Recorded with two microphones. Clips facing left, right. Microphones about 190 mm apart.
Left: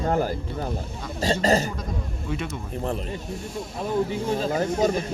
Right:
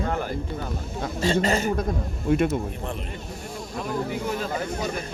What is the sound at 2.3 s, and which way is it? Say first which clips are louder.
Speech: right 10 dB; 50° right (ahead or behind).